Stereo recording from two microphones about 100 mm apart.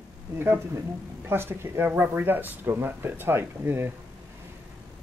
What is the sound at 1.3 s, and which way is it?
Speech, 25° right (ahead or behind).